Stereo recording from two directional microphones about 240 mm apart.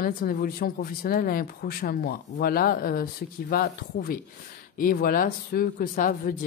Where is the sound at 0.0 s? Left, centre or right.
Left.